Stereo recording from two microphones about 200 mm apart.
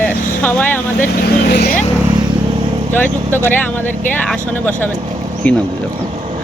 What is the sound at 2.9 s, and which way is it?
Speech, 10° left (ahead or behind).